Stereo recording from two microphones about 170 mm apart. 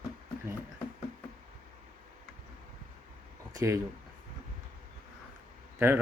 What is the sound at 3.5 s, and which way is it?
Speech, 15° right (ahead or behind).